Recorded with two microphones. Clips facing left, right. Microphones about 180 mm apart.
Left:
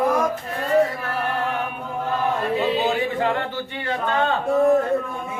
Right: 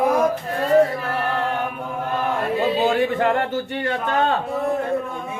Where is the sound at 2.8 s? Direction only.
50° right (ahead or behind).